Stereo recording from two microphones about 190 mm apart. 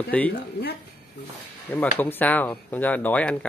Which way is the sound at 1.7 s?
10° left (ahead or behind).